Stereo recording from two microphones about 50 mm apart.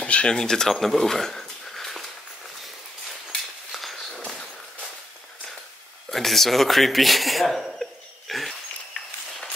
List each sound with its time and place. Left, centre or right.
0.0 s speech: left; by 2.0 s centre
3.3 s a sound: centre
6.0 s speech: centre